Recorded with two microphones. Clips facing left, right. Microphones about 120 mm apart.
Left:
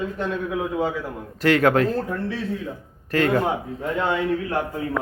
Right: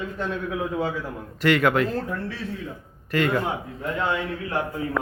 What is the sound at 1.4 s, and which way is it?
Speech, 40° left (ahead or behind).